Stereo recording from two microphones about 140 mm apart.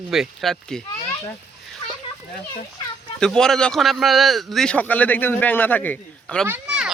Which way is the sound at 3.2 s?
5° left (ahead or behind).